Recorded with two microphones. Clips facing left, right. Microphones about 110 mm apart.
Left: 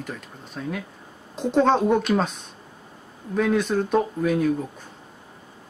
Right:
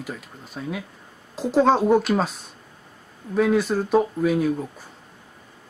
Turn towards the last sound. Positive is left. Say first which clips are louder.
# right 1 dB
turn(degrees=-5)  # may be behind; listen again after turning